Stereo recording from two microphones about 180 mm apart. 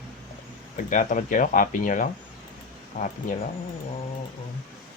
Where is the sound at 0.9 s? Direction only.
45° left (ahead or behind).